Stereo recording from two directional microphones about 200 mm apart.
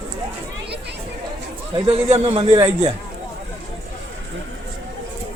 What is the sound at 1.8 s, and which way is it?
Speech, 30° right (ahead or behind).